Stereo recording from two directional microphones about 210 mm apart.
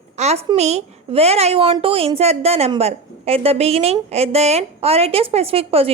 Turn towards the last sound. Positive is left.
turn(degrees=-30)  # may be behind; listen again after turning